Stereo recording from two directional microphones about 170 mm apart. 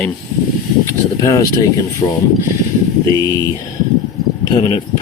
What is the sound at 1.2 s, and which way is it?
Speech, 20° left (ahead or behind).